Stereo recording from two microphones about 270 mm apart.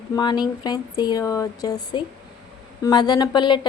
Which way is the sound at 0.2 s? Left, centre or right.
Centre.